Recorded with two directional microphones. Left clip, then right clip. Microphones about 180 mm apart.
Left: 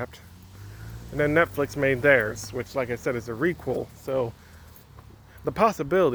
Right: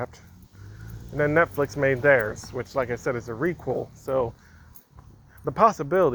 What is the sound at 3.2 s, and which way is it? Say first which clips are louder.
Speech: left 1 dB; 50° left (ahead or behind).